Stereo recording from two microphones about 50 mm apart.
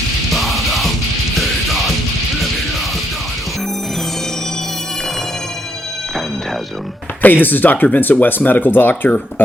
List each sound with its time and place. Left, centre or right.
0.3 s music: centre
7.2 s speech: left